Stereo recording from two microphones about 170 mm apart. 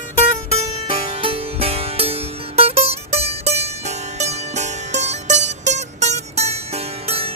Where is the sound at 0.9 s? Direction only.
35° right (ahead or behind).